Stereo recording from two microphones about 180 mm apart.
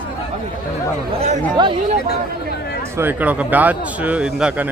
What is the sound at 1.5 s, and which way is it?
Speech, 30° right (ahead or behind).